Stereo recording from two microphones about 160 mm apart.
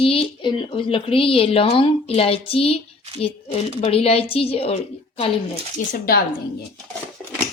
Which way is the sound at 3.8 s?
35° left (ahead or behind).